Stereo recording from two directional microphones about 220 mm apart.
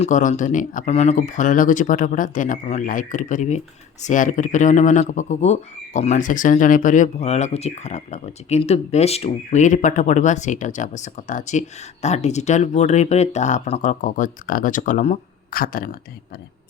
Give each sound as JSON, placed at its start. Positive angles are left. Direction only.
{"t": 0.0, "sound": "speech", "side_deg": 35}